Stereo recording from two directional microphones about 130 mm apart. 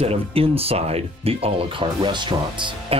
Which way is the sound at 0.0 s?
50° right (ahead or behind).